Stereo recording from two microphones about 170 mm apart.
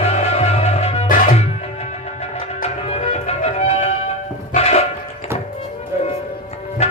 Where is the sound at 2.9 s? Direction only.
40° left (ahead or behind).